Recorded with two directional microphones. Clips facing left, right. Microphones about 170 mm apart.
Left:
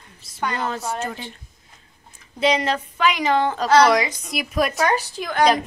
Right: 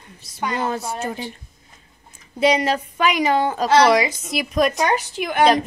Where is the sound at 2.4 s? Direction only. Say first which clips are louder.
Right 2 dB; 10° right (ahead or behind).